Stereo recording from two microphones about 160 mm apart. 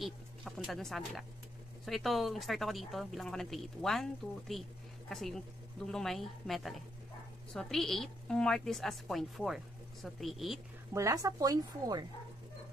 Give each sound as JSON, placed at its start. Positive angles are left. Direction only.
{"t": 0.0, "sound": "speech", "side_deg": 0}
{"t": 10.9, "sound": "speech", "side_deg": -20}